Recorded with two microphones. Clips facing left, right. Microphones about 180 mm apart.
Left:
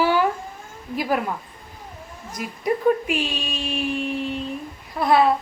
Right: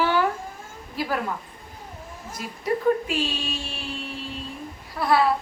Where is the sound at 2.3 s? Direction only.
15° left (ahead or behind).